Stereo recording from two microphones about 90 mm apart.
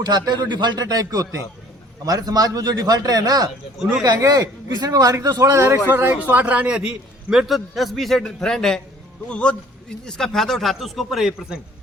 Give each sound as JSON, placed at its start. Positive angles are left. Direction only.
{"t": 0.0, "sound": "a man's voice", "side_deg": -50}